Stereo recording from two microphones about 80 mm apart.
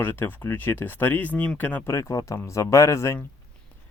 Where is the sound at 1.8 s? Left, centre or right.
Left.